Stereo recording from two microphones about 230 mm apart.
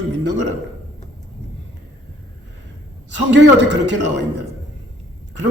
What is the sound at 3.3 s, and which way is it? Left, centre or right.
Speech, right.